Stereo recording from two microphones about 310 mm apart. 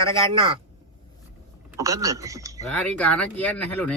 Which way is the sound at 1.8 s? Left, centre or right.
Centre.